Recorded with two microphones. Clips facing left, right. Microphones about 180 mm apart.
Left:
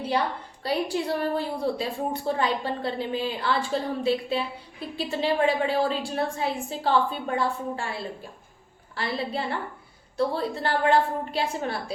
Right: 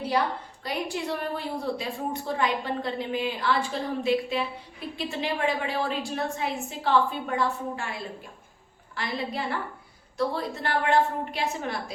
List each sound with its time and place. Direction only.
0.6 s a woman's voice: 30° left (ahead or behind)